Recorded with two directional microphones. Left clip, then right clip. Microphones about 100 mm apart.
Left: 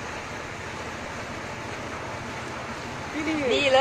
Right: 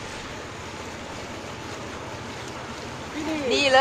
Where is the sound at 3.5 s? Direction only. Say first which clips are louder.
Right 2 dB; 30° right (ahead or behind).